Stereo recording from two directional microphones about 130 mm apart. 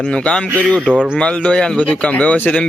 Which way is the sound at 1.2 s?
5° left (ahead or behind).